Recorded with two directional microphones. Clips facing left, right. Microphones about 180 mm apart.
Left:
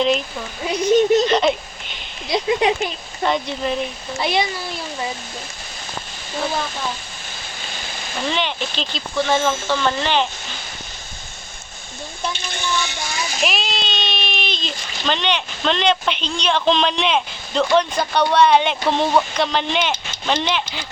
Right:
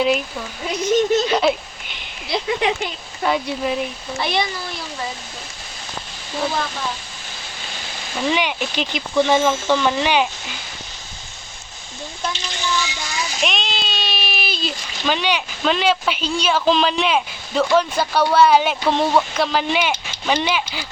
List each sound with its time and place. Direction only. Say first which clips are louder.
0.3 s speech: left 2 dB; 10° left (ahead or behind)
1.3 s speech: left 1 dB; 5° right (ahead or behind)
2.6 s speech: left 3 dB; 25° left (ahead or behind)
3.2 s speech: even; 5° right (ahead or behind)
4.2 s speech: left 2 dB; 10° left (ahead or behind)
8.2 s speech: right 2 dB; 10° right (ahead or behind)
12.3 s a sound: right 1 dB; 50° left (ahead or behind)
13.4 s speech: left 1 dB; 5° left (ahead or behind)